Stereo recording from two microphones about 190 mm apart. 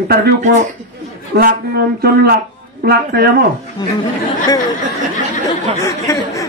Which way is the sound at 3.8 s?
20° left (ahead or behind).